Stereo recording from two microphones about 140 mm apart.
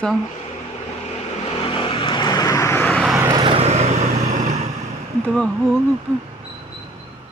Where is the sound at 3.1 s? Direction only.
20° right (ahead or behind).